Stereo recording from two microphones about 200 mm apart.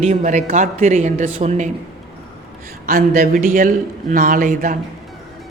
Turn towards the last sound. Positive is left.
turn(degrees=-40)  # may be behind; listen again after turning